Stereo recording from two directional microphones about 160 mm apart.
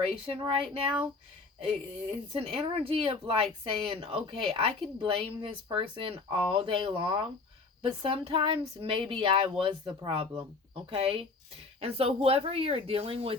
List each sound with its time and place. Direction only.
0.0 s speech: 35° right (ahead or behind)